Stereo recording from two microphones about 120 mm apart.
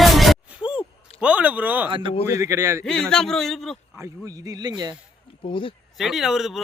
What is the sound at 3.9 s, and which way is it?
A man's voice, 25° right (ahead or behind).